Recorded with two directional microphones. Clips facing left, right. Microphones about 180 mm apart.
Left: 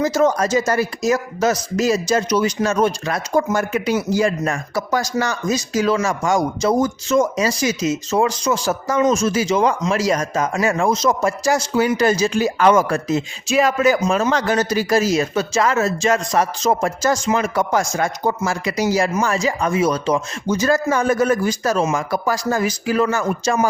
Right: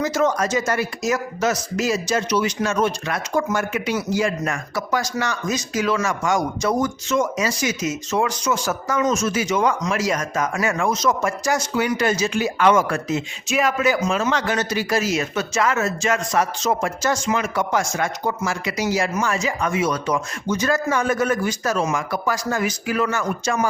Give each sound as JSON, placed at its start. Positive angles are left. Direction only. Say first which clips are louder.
{"t": 0.0, "sound": "speech", "louder": "left 3 dB", "side_deg": 35}